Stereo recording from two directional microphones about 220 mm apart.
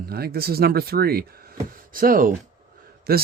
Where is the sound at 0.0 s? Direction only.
45° right (ahead or behind).